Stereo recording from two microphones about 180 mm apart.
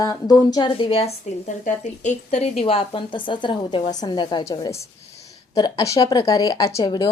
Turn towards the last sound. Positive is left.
turn(degrees=25)  # may be behind; listen again after turning